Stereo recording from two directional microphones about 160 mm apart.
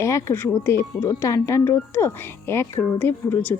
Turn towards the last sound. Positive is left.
turn(degrees=10)  # may be behind; listen again after turning